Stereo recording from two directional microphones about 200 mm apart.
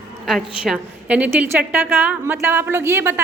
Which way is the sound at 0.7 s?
5° right (ahead or behind).